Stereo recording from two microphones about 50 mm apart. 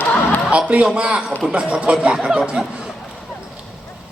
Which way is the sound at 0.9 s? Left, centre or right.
Centre.